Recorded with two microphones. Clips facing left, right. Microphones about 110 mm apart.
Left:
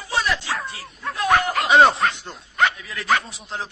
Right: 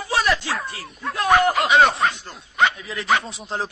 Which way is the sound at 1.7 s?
30° left (ahead or behind).